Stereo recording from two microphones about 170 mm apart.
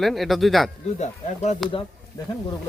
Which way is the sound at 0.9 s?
40° left (ahead or behind).